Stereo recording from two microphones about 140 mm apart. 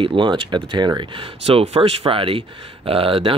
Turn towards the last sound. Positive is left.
turn(degrees=-40)  # may be behind; listen again after turning